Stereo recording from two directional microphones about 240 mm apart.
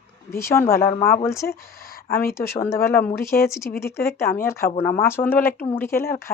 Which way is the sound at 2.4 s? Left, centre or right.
Centre.